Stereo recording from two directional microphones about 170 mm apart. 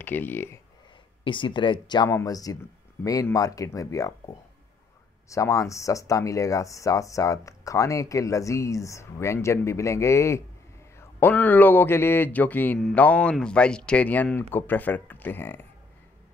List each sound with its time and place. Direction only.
0.0 s speech: 10° left (ahead or behind)
1.2 s speech: 30° left (ahead or behind)
5.3 s speech: 20° left (ahead or behind)